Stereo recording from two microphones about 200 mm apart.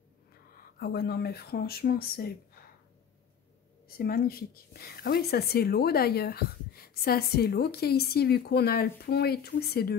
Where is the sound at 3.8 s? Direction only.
50° left (ahead or behind).